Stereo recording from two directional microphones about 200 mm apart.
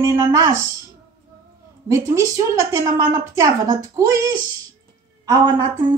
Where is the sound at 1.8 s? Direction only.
15° right (ahead or behind).